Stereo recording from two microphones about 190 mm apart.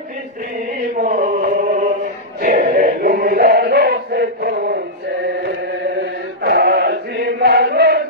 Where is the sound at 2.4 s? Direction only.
45° right (ahead or behind).